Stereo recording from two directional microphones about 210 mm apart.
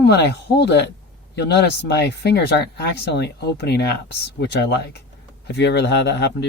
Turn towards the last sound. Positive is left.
turn(degrees=55)  # may be behind; listen again after turning